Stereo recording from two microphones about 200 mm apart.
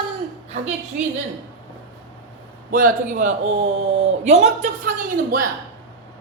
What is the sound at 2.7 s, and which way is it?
Speech, 40° right (ahead or behind).